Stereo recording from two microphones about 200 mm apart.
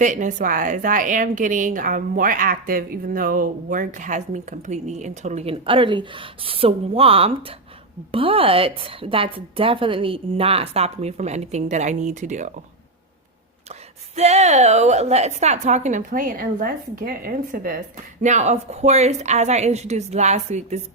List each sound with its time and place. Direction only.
0.0 s a woman's voice: 40° right (ahead or behind)
14.2 s a woman's voice: 30° right (ahead or behind)